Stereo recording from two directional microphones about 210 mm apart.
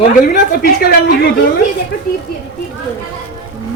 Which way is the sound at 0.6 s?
45° left (ahead or behind).